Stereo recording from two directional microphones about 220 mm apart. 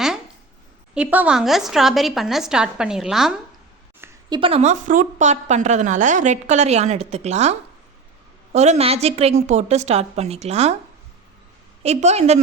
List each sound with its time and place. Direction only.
0.9 s a woman's voice: 5° right (ahead or behind)
4.0 s a woman's voice: 20° right (ahead or behind)
8.5 s a woman's voice: 30° right (ahead or behind)
11.8 s a woman's voice: 30° right (ahead or behind)